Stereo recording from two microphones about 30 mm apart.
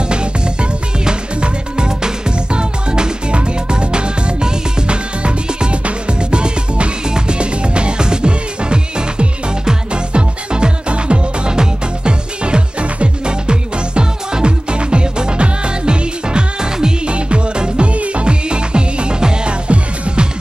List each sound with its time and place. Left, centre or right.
0.1 s music: right
18.2 s music: right